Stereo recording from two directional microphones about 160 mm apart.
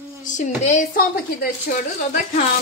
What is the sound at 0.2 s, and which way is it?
Speech, 50° left (ahead or behind).